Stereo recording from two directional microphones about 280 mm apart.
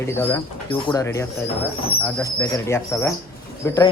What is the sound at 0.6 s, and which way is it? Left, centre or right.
Speech, centre.